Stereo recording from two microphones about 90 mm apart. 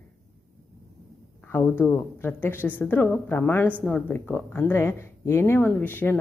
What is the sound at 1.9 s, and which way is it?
A woman's voice, 25° left (ahead or behind).